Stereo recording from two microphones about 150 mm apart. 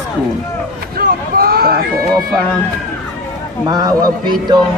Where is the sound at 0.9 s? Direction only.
85° right.